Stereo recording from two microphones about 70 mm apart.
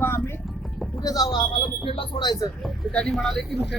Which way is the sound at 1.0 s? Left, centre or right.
Left.